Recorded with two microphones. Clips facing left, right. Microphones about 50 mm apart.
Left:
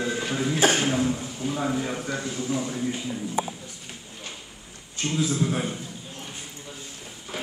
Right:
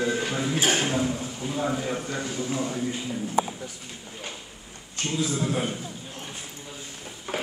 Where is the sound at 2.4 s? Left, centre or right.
Centre.